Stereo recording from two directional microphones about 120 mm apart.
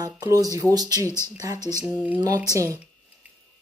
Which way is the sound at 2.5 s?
25° right (ahead or behind).